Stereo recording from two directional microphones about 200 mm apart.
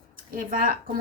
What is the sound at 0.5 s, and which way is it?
Speech, 45° right (ahead or behind).